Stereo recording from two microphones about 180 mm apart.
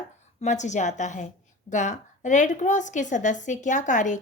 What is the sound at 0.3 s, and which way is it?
A woman's voice, 40° left (ahead or behind).